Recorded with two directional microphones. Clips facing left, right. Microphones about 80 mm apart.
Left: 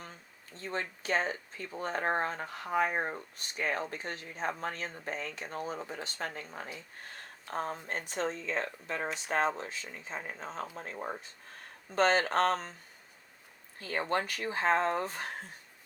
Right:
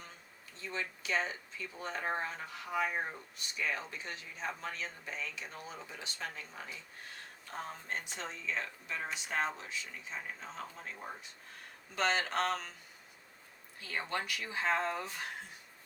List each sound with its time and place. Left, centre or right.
0.5 s speech: left
13.7 s speech: left